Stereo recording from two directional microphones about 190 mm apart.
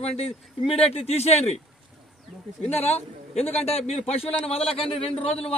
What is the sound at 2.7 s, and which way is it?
Speech, 35° left (ahead or behind).